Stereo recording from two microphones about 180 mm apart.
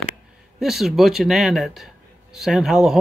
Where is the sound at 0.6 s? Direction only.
Centre (ahead or behind).